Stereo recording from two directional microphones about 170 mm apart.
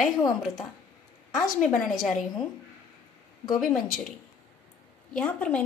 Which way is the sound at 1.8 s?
Centre (ahead or behind).